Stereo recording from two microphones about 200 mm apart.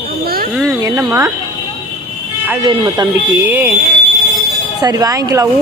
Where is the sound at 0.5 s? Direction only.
15° right (ahead or behind).